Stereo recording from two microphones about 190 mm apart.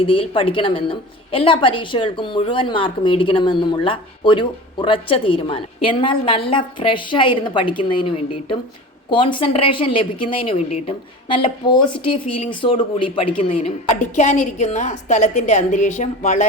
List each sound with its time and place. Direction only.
0.0 s a woman's voice: 30° left (ahead or behind)